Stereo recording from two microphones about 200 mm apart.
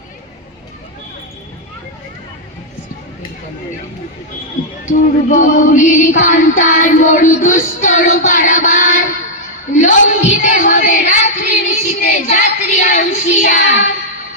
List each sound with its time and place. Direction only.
4.9 s music: 40° left (ahead or behind)
10.2 s child singing: 35° left (ahead or behind)